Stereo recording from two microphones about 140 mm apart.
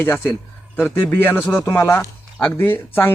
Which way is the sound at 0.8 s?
15° left (ahead or behind).